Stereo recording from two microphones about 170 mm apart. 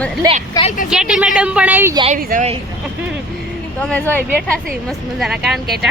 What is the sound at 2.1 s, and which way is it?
Speech, 45° right (ahead or behind).